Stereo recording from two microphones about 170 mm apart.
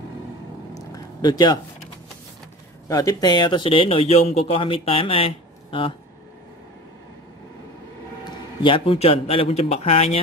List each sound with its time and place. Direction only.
0.7 s a sound: 20° left (ahead or behind)
2.9 s speech: 20° left (ahead or behind)
8.6 s speech: 30° left (ahead or behind)